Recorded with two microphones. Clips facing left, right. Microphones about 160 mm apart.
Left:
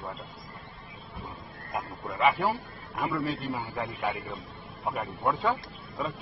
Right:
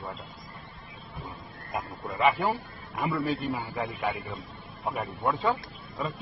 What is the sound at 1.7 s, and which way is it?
A man's voice, centre (ahead or behind).